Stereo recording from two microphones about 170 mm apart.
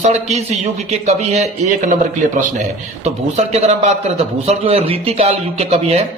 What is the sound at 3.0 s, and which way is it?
A man's voice, 40° right (ahead or behind).